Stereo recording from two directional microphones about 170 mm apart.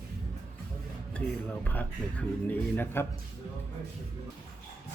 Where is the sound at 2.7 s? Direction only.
15° left (ahead or behind).